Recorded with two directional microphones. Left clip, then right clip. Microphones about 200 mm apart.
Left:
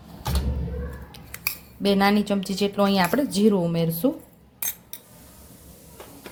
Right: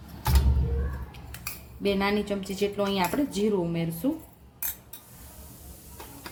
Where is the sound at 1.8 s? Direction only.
45° left (ahead or behind).